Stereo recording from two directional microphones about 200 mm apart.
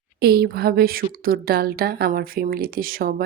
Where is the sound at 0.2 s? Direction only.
50° right (ahead or behind).